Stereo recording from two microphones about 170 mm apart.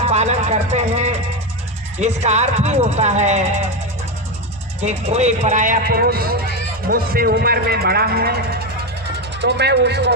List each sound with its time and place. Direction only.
0.1 s speech: 40° right (ahead or behind)
4.8 s a man's voice: 40° right (ahead or behind); by 8.6 s 70° right (ahead or behind)
9.4 s speech: 80° right